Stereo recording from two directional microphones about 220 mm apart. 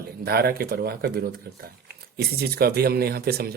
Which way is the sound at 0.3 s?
45° right (ahead or behind).